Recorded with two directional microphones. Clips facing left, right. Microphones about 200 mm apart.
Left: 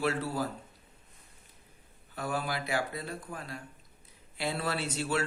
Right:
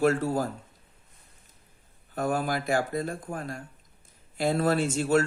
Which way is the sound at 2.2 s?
50° right (ahead or behind).